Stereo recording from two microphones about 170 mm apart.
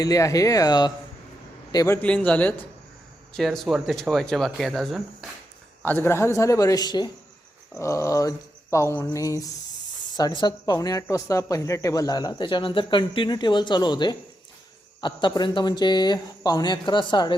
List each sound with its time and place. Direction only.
0.0 s speech: 20° left (ahead or behind)
2.0 s speech: 5° left (ahead or behind)
5.8 s speech: 10° left (ahead or behind)